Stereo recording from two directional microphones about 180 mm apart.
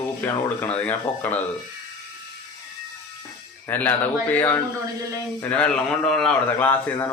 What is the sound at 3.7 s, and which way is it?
A man's voice, 10° left (ahead or behind).